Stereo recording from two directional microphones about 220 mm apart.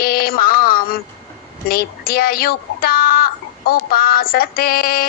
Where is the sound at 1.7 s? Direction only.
40° left (ahead or behind).